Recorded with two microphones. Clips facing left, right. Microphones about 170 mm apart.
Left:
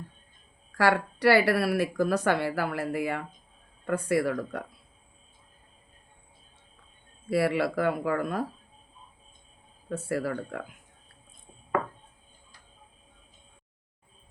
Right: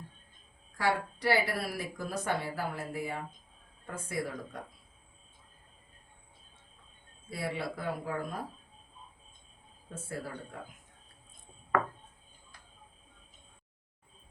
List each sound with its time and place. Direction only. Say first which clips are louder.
0.8 s speech: left 7 dB; 75° left (ahead or behind)
7.3 s speech: left 11 dB; 75° left (ahead or behind)
9.9 s speech: left 10 dB; 75° left (ahead or behind)